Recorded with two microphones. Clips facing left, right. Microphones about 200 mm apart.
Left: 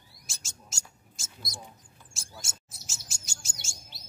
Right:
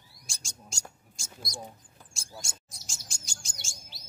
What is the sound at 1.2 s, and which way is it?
Mouse, centre (ahead or behind).